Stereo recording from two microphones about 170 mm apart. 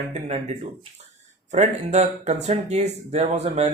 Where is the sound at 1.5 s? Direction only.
40° right (ahead or behind).